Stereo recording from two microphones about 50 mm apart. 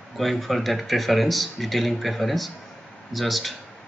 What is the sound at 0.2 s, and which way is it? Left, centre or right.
Speech, centre.